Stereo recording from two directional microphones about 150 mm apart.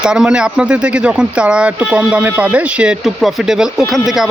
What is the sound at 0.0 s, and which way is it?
Speech, 5° right (ahead or behind).